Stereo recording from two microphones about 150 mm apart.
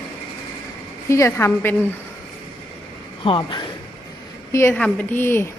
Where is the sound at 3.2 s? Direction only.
35° left (ahead or behind).